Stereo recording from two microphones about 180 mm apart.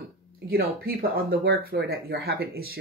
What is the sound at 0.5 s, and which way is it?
Speech, 55° right (ahead or behind).